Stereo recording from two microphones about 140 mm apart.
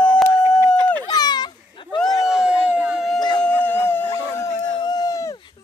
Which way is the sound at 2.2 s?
5° right (ahead or behind).